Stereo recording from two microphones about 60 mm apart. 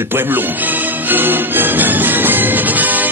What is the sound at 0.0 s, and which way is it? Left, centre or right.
Music, right.